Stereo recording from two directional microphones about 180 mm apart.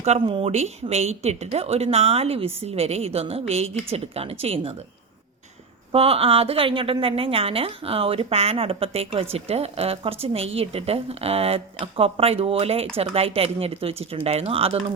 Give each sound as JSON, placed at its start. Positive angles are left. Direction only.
{"t": 0.0, "sound": "speech", "side_deg": -35}
{"t": 5.9, "sound": "speech", "side_deg": -30}